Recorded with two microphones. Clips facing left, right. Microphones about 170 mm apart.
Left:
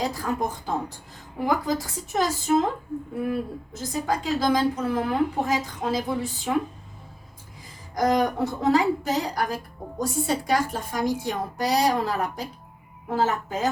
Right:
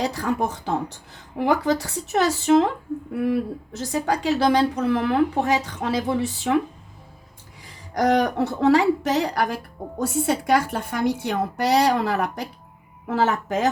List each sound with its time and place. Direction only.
0.0 s a woman's voice: 75° right (ahead or behind)
7.9 s a woman's voice: 75° right (ahead or behind)